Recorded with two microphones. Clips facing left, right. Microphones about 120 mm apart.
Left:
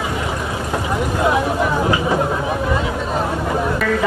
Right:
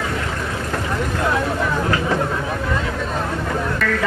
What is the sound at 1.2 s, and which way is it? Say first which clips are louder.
Speech: left 4 dB; 15° left (ahead or behind).